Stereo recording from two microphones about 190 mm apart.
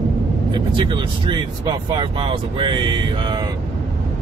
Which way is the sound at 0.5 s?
25° right (ahead or behind).